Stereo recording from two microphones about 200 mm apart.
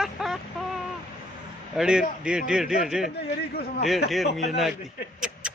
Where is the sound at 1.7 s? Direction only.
5° right (ahead or behind).